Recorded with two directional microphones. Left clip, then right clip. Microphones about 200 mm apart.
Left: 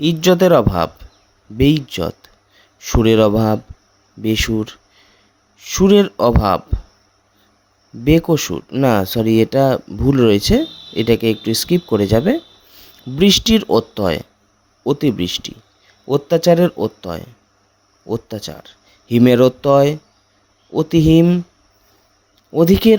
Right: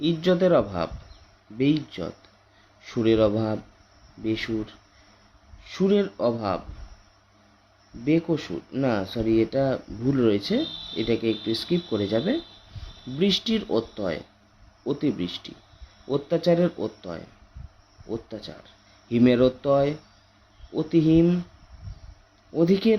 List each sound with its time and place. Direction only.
0.0 s speech: 55° left (ahead or behind)
8.0 s speech: 55° left (ahead or behind)
22.5 s speech: 50° left (ahead or behind)